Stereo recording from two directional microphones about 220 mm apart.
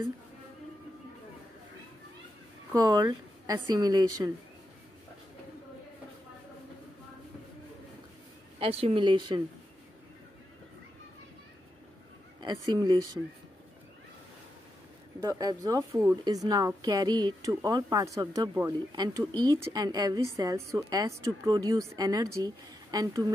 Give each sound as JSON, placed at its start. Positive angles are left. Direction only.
{"t": 2.7, "sound": "a woman's voice", "side_deg": -15}
{"t": 8.5, "sound": "speech", "side_deg": -25}
{"t": 12.4, "sound": "speech", "side_deg": -20}
{"t": 15.1, "sound": "a woman's voice", "side_deg": -15}